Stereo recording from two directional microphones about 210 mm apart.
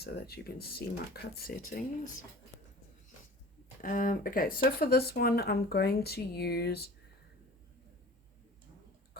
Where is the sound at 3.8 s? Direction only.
40° left (ahead or behind).